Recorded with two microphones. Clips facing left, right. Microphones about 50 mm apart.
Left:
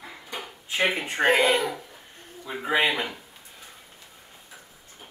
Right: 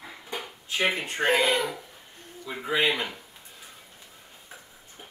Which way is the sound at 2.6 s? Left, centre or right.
Left.